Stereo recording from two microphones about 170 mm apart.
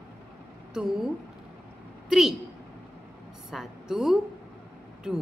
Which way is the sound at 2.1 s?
Centre (ahead or behind).